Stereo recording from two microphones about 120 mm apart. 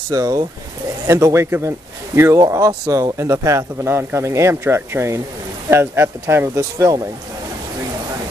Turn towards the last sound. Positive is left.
turn(degrees=-30)  # may be behind; listen again after turning